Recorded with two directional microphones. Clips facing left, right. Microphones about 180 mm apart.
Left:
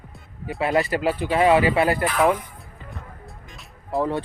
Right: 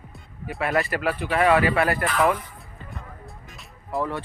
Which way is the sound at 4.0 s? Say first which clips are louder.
Left 4 dB; 20° left (ahead or behind).